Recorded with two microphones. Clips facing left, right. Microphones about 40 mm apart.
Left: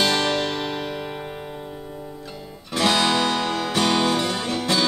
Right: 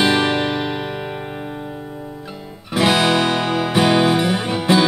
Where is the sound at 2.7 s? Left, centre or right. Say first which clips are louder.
Right 4 dB; centre.